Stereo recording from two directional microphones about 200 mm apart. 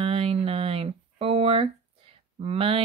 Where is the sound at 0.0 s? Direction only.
30° right (ahead or behind).